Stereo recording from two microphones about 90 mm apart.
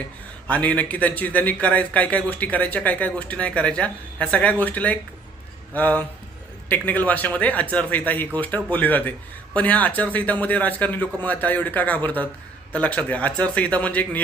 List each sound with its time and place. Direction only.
0.4 s a man's voice: 15° left (ahead or behind)